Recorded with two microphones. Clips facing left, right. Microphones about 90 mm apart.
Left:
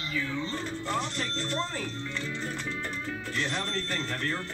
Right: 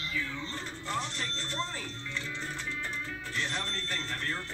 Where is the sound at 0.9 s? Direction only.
50° left (ahead or behind).